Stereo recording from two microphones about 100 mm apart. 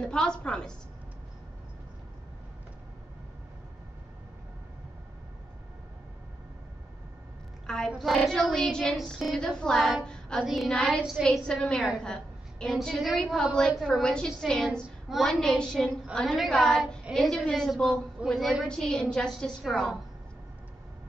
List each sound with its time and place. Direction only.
0.0 s a woman's voice: 10° left (ahead or behind)
7.6 s a woman's voice: 10° left (ahead or behind)
12.0 s a sound: 10° left (ahead or behind)
12.7 s a woman's voice: centre (ahead or behind)